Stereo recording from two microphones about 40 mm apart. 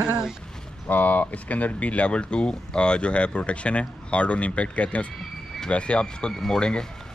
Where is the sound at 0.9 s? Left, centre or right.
Left.